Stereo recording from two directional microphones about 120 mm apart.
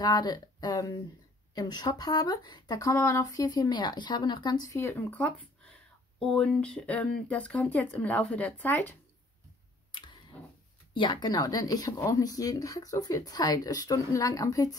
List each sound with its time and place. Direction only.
0.0 s speech: 35° left (ahead or behind)
5.1 s speech: 10° left (ahead or behind)
10.9 s speech: 40° left (ahead or behind)